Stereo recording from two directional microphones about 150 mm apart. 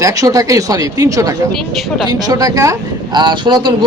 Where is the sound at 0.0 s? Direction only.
25° right (ahead or behind).